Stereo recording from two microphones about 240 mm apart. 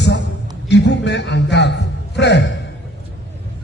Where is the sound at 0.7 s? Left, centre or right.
Left.